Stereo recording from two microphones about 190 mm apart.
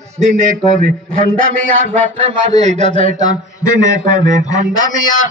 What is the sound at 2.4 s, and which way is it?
Speech, 35° right (ahead or behind).